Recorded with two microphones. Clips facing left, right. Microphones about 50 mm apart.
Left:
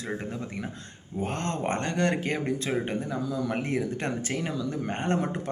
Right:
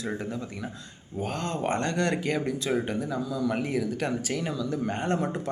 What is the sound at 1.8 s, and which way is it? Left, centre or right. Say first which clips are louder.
A man's voice: even; left.